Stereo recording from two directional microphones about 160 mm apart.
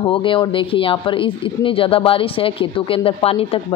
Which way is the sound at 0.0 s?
35° left (ahead or behind).